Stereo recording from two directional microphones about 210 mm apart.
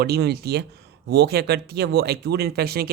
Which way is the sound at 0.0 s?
50° right (ahead or behind).